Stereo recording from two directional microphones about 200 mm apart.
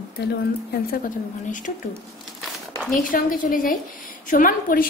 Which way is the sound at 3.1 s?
45° left (ahead or behind).